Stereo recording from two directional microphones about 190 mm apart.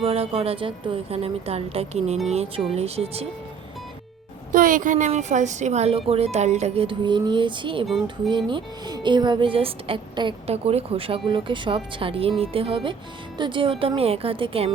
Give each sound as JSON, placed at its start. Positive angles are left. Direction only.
{"t": 0.0, "sound": "speech", "side_deg": -30}
{"t": 4.5, "sound": "a woman's voice", "side_deg": -45}